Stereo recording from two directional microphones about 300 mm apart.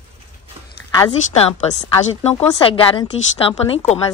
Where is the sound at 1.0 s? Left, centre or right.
Centre.